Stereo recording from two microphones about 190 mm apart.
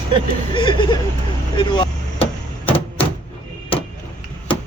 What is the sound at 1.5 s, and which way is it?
Vehicle, 25° left (ahead or behind).